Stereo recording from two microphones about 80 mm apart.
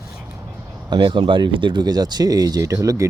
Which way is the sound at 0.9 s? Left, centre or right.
Right.